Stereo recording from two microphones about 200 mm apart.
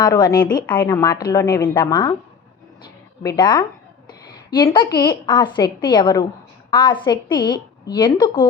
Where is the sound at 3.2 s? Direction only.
20° left (ahead or behind).